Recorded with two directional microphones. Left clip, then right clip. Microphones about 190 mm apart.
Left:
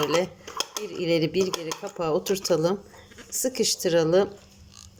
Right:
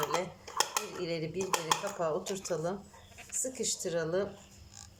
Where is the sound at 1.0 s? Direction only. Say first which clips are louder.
Left 12 dB; 45° left (ahead or behind).